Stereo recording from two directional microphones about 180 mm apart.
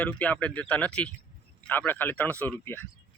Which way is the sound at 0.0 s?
5° left (ahead or behind).